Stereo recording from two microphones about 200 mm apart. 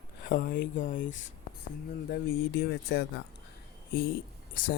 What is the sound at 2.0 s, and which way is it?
Speech, 50° left (ahead or behind).